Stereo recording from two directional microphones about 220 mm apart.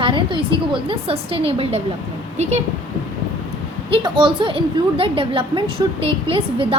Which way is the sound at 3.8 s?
25° right (ahead or behind).